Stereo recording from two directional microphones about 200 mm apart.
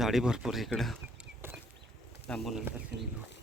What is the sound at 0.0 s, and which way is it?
Speech, centre (ahead or behind).